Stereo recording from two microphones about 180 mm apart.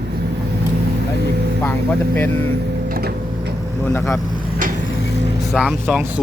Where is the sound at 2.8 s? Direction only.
60° right (ahead or behind).